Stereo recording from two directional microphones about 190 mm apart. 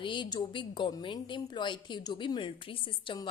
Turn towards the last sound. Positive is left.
turn(degrees=25)  # may be behind; listen again after turning